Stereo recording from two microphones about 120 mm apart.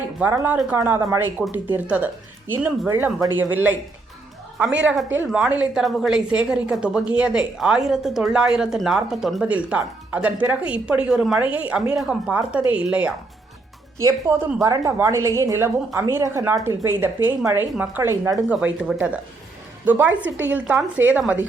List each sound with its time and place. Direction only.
0.2 s a woman's voice: 15° right (ahead or behind)
12.4 s speech: 15° right (ahead or behind)
14.0 s a woman's voice: 25° right (ahead or behind)
18.4 s speech: 10° right (ahead or behind)